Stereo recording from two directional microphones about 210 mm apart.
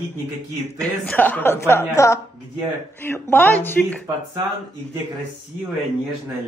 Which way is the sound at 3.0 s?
10° left (ahead or behind).